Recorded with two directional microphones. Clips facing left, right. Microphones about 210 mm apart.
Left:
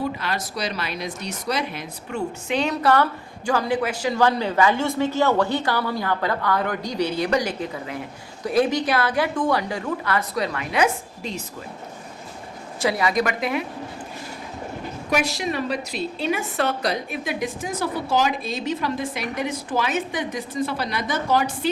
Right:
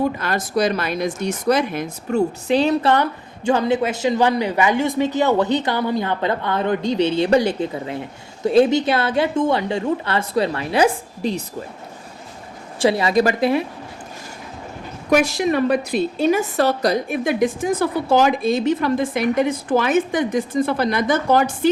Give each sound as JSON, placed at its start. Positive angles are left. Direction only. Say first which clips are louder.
{"t": 0.0, "sound": "a woman's voice", "louder": "right 5 dB", "side_deg": -50}
{"t": 2.9, "sound": "speech", "louder": "right 1 dB", "side_deg": -20}
{"t": 12.8, "sound": "speech", "louder": "right 5 dB", "side_deg": -25}
{"t": 15.1, "sound": "a woman's voice", "louder": "right 7 dB", "side_deg": -50}